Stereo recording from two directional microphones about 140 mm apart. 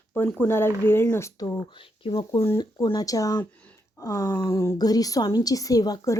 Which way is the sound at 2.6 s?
30° left (ahead or behind).